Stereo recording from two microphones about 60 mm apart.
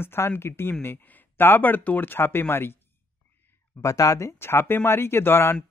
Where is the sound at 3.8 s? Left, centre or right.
Left.